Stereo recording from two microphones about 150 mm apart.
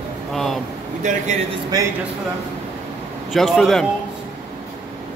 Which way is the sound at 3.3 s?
Centre (ahead or behind).